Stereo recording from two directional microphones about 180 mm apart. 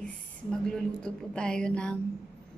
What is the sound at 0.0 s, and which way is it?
Speech, 5° left (ahead or behind).